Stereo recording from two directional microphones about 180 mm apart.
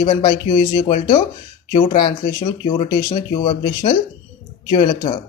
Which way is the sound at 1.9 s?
25° left (ahead or behind).